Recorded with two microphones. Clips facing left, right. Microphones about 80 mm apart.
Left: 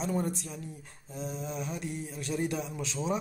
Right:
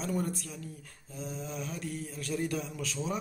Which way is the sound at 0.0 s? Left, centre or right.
Left.